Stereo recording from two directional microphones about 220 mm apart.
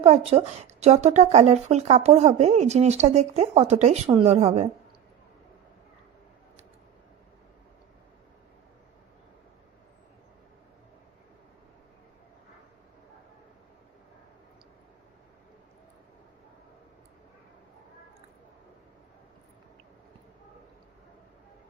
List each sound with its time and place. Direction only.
0.0 s a woman's voice: 25° right (ahead or behind)